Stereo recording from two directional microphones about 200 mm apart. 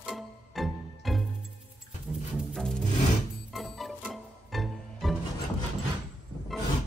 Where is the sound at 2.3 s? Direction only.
Centre (ahead or behind).